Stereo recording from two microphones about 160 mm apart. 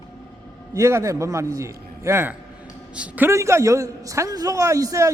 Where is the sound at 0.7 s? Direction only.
20° right (ahead or behind).